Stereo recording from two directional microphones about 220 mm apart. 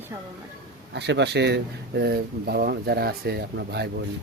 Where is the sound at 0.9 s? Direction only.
50° right (ahead or behind).